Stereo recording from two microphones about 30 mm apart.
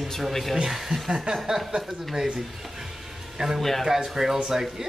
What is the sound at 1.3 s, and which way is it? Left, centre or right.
Speech, right.